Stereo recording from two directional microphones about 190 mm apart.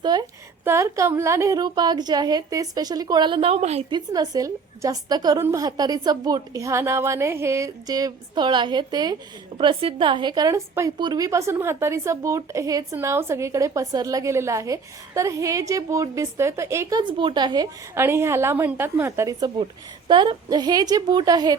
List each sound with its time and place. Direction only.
0.0 s a woman's voice: 20° right (ahead or behind)